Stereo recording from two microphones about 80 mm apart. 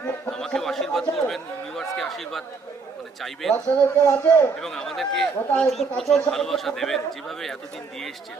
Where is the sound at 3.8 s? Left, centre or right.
Left.